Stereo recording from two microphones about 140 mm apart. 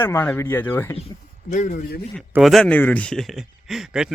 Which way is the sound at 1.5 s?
60° left (ahead or behind).